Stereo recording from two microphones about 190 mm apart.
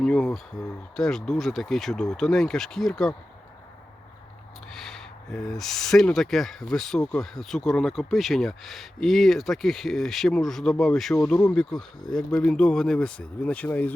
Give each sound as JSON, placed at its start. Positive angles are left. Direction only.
{"t": 0.0, "sound": "speech", "side_deg": 0}
{"t": 4.7, "sound": "speech", "side_deg": 0}